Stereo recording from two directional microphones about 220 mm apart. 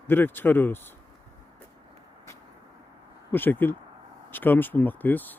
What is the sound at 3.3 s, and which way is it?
Speech, 10° left (ahead or behind).